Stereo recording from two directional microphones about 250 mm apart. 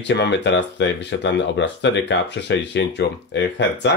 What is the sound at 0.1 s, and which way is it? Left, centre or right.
Speech, left.